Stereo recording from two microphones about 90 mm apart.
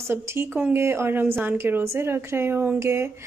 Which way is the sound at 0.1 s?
25° right (ahead or behind).